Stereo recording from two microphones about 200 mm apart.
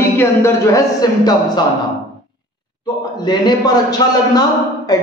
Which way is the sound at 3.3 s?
20° left (ahead or behind).